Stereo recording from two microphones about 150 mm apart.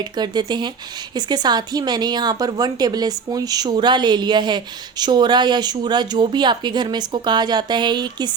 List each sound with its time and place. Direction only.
0.0 s a woman's voice: 30° right (ahead or behind)